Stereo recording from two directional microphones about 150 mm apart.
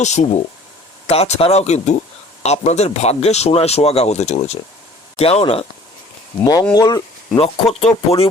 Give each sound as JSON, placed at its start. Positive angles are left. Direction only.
{"t": 0.0, "sound": "a man's voice", "side_deg": 50}
{"t": 6.4, "sound": "speech", "side_deg": 25}
{"t": 7.3, "sound": "speech", "side_deg": 40}